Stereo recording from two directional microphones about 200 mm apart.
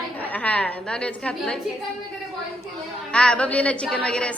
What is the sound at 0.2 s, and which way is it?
A woman's voice, 10° left (ahead or behind).